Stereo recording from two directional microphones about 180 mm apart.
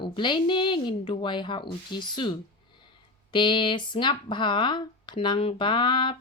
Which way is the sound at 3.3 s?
25° left (ahead or behind).